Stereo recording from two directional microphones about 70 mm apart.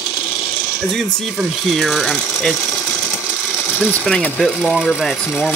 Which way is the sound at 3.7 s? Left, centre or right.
Left.